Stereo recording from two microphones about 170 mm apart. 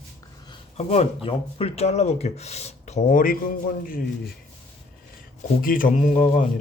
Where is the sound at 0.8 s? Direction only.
40° left (ahead or behind); by 4.0 s 55° left (ahead or behind).